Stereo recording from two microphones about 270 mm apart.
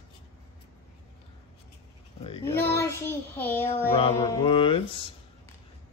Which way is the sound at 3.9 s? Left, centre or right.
Left.